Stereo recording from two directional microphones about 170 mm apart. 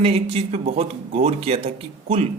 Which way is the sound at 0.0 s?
35° right (ahead or behind).